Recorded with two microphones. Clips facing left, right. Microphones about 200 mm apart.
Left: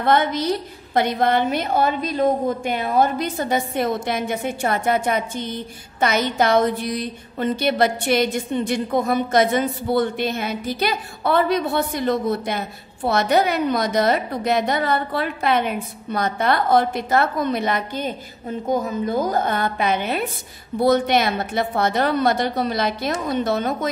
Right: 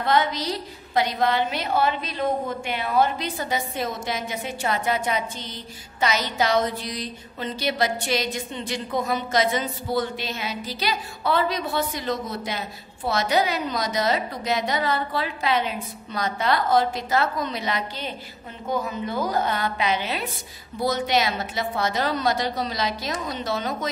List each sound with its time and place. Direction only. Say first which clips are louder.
0.0 s a woman's voice: left 4 dB; 55° left (ahead or behind)